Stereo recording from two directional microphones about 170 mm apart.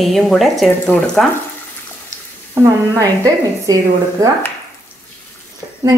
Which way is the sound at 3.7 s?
20° right (ahead or behind).